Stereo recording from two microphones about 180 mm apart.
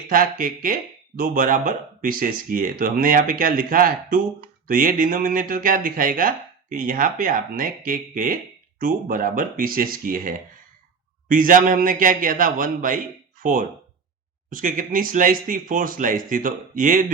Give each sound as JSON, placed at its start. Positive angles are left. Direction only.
{"t": 0.1, "sound": "speech", "side_deg": -50}